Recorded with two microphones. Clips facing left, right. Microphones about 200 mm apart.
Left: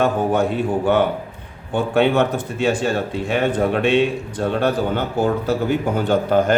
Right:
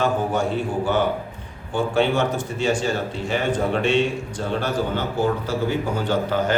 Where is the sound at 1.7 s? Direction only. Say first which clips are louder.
Left 3 dB; 60° left (ahead or behind).